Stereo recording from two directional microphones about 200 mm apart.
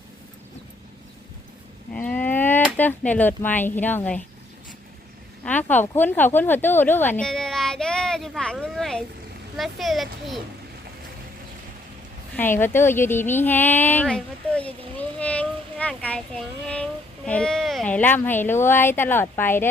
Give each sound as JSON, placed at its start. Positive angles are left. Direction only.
{"t": 1.9, "sound": "speech", "side_deg": 10}
{"t": 5.5, "sound": "a sound", "side_deg": 10}
{"t": 9.6, "sound": "a child's voice", "side_deg": 0}
{"t": 12.4, "sound": "speech", "side_deg": 10}